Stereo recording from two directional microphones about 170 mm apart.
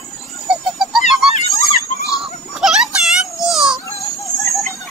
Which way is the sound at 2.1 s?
Centre (ahead or behind).